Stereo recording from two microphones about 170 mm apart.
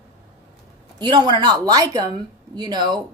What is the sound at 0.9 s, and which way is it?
A woman's voice, 25° right (ahead or behind).